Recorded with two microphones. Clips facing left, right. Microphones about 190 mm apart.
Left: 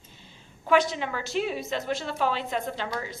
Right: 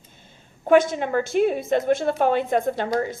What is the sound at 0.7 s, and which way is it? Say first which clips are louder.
A woman's voice: right 6 dB; 50° right (ahead or behind).